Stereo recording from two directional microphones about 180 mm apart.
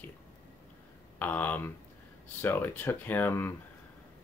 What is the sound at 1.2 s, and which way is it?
Speech, 10° left (ahead or behind).